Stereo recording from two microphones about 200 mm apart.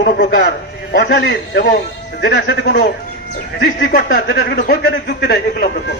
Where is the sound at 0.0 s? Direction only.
50° left (ahead or behind).